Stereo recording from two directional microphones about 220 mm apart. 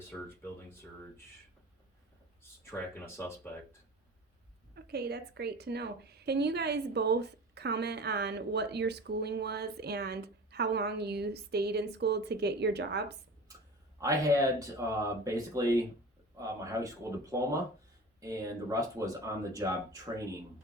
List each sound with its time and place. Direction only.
0.4 s speech: 10° left (ahead or behind)
2.6 s speech: 10° left (ahead or behind)
4.7 s a woman's voice: 45° right (ahead or behind)
14.0 s speech: 15° right (ahead or behind)